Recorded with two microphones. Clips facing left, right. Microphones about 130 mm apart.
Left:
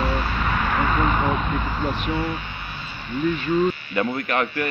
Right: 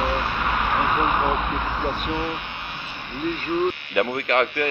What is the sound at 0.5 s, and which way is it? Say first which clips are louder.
Speech: even; 15° right (ahead or behind).